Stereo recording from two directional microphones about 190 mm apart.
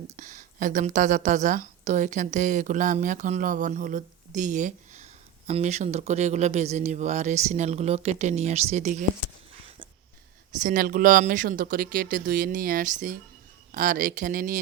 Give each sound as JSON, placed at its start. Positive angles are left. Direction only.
{"t": 0.1, "sound": "speech", "side_deg": -40}
{"t": 9.6, "sound": "a sound", "side_deg": -25}
{"t": 10.6, "sound": "speech", "side_deg": -45}